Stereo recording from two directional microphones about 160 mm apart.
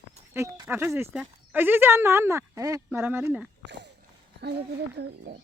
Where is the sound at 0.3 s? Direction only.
20° right (ahead or behind).